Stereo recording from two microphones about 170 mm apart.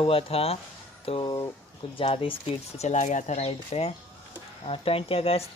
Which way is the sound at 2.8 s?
45° left (ahead or behind).